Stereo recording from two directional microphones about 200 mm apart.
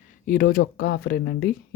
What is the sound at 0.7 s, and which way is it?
Speech, 50° left (ahead or behind).